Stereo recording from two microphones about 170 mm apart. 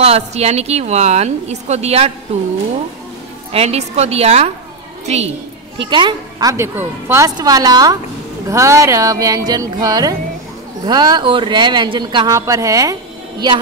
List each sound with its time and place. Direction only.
0.0 s a woman's voice: 40° right (ahead or behind)
3.5 s a woman's voice: 40° right (ahead or behind)
5.8 s a child's voice: 30° right (ahead or behind)
6.5 s a man's voice: 15° right (ahead or behind)